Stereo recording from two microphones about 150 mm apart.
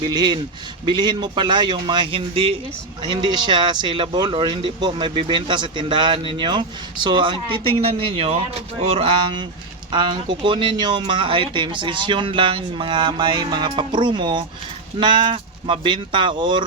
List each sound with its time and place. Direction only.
0.0 s a man's voice: 30° right (ahead or behind)